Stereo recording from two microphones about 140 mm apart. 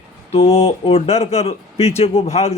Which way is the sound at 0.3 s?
45° left (ahead or behind).